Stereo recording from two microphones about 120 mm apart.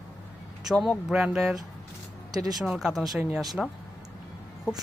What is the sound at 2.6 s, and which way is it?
Speech, 5° right (ahead or behind).